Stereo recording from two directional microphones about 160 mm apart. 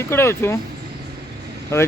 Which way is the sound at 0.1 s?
15° left (ahead or behind).